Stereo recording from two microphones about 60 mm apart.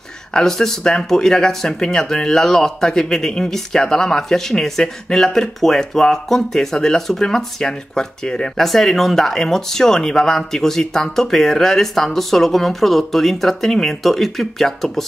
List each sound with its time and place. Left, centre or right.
0.3 s speech: centre